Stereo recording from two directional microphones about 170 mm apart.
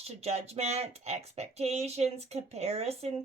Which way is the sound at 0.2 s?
40° right (ahead or behind).